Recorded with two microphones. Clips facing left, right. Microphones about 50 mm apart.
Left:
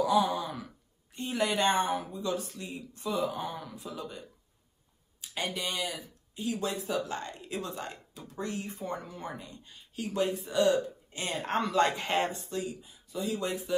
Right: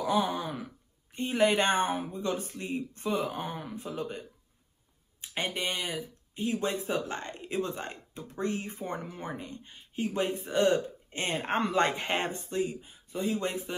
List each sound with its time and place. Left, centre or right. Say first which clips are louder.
0.0 s speech: left 2 dB; right